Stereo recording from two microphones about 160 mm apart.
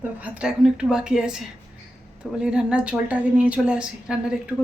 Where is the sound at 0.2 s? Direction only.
10° right (ahead or behind).